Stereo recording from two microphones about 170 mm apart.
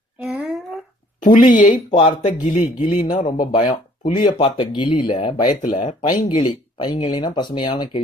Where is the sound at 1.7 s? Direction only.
30° left (ahead or behind).